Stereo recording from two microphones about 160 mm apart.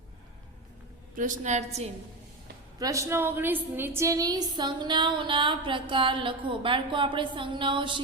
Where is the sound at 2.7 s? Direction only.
20° right (ahead or behind).